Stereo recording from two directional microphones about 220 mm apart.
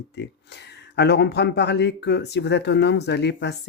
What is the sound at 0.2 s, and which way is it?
Speech, 50° left (ahead or behind).